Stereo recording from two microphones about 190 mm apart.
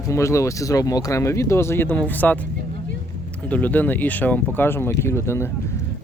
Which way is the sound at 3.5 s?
10° left (ahead or behind).